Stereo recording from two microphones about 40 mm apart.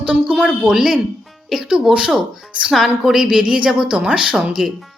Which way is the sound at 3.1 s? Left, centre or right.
Right.